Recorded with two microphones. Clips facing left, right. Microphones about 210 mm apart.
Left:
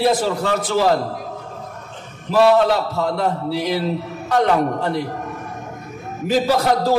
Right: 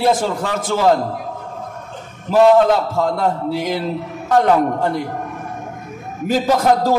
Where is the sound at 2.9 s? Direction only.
45° right (ahead or behind).